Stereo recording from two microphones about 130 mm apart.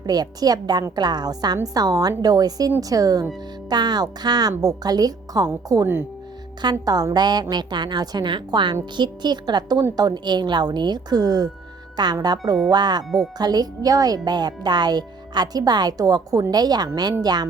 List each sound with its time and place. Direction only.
0.0 s a woman's voice: 30° right (ahead or behind)
6.6 s speech: 30° right (ahead or behind)